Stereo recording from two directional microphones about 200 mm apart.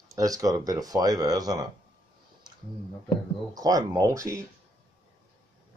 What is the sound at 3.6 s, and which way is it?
Speech, 20° right (ahead or behind).